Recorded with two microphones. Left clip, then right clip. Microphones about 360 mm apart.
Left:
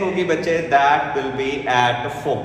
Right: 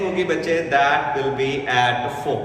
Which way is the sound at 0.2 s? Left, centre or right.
Centre.